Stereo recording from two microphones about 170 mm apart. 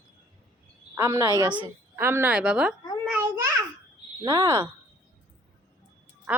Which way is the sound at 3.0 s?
5° right (ahead or behind).